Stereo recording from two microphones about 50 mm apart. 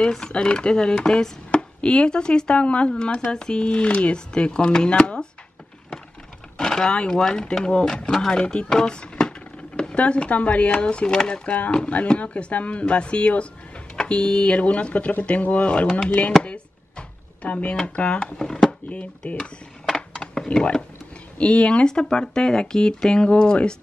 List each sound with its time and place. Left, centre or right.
0.1 s speech: centre
6.6 s speech: centre
9.9 s speech: left
16.1 s speech: left
17.4 s speech: left
18.4 s speech: centre
18.9 s speech: left
20.2 s a sound: centre
21.4 s speech: left